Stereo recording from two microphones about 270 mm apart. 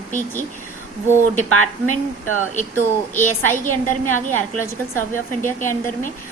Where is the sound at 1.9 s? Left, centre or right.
Left.